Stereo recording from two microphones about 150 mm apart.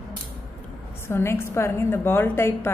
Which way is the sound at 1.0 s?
15° left (ahead or behind).